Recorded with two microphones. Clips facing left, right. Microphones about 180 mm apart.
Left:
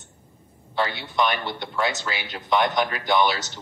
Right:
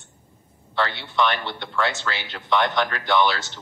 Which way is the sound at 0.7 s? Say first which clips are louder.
Right 1 dB; 15° left (ahead or behind).